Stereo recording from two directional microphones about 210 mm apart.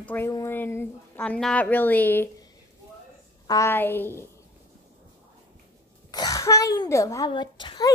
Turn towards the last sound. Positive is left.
turn(degrees=20)  # may be behind; listen again after turning